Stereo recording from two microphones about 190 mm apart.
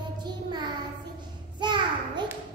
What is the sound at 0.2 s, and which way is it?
Child singing, 25° right (ahead or behind).